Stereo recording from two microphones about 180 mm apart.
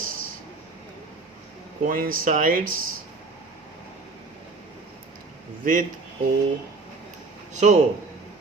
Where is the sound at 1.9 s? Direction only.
50° right (ahead or behind).